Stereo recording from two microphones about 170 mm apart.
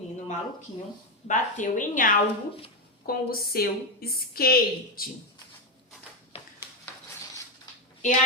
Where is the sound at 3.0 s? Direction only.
60° left (ahead or behind).